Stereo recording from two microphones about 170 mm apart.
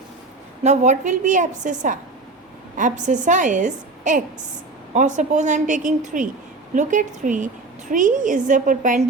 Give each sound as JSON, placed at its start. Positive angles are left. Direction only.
{"t": 0.6, "sound": "a woman's voice", "side_deg": -45}